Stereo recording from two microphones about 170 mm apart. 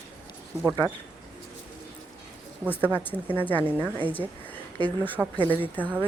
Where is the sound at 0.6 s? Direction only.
20° right (ahead or behind).